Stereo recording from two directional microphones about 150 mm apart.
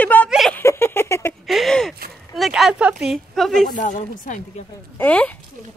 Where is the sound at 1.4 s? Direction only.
Centre (ahead or behind).